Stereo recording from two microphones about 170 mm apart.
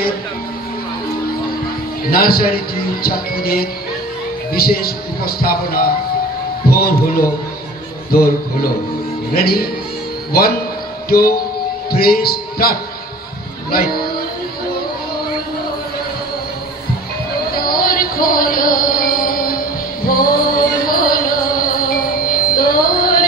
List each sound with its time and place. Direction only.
2.0 s speech: 60° left (ahead or behind)
11.1 s music: 60° left (ahead or behind)
11.9 s speech: 60° left (ahead or behind)
13.7 s music: 60° left (ahead or behind)
17.5 s music: 60° left (ahead or behind)